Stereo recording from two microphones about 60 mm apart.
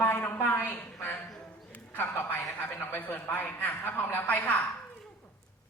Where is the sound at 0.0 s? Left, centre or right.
Left.